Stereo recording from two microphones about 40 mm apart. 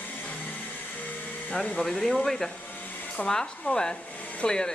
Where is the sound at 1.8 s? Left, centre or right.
Centre.